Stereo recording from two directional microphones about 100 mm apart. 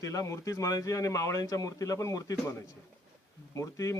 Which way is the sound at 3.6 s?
30° left (ahead or behind).